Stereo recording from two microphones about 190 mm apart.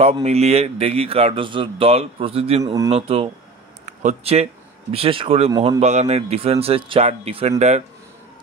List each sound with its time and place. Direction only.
0.0 s a man's voice: 35° right (ahead or behind)
2.6 s speech: 15° right (ahead or behind)
2.9 s a man's voice: 30° right (ahead or behind)